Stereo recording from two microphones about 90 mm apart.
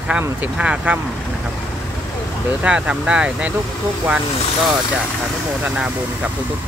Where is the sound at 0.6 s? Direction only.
15° right (ahead or behind).